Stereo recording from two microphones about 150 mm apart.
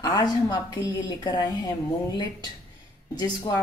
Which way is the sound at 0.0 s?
25° left (ahead or behind).